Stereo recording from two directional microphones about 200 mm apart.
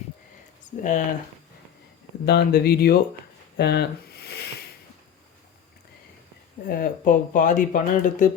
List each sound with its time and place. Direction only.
0.8 s speech: 40° left (ahead or behind)
2.2 s speech: 50° left (ahead or behind)
3.6 s a sound: 55° left (ahead or behind)
6.7 s speech: 45° left (ahead or behind)